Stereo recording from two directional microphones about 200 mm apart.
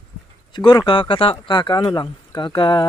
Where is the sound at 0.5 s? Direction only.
25° left (ahead or behind).